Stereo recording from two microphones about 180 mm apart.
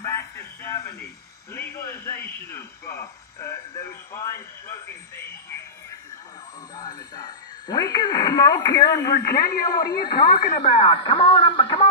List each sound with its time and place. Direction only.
0.0 s radio: 15° left (ahead or behind)
1.5 s speech: 15° left (ahead or behind)
6.7 s speech: 20° left (ahead or behind)
9.2 s a man's voice: 55° left (ahead or behind)
10.6 s speech: 30° left (ahead or behind)